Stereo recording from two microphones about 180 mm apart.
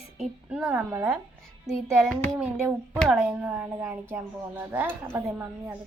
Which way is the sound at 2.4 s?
10° right (ahead or behind).